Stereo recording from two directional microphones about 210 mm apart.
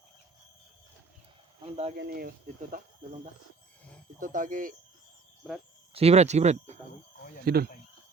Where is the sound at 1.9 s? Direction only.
50° right (ahead or behind).